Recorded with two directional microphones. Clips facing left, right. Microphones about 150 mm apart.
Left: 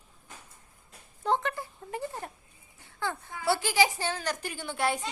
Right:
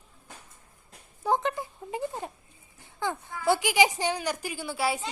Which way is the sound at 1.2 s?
15° right (ahead or behind).